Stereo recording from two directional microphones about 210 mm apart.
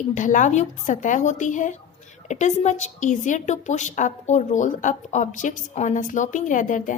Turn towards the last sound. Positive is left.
turn(degrees=40)  # may be behind; listen again after turning